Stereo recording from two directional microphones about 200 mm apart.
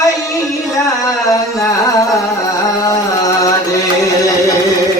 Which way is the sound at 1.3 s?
15° left (ahead or behind).